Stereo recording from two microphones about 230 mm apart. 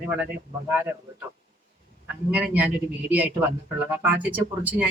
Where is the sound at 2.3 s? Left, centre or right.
Centre.